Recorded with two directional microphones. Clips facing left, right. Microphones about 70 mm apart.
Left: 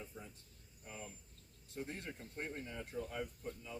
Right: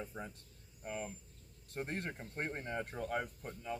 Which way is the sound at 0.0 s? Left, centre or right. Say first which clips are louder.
Right 6 dB; right.